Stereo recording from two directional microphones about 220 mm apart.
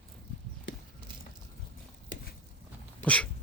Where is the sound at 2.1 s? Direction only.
55° left (ahead or behind).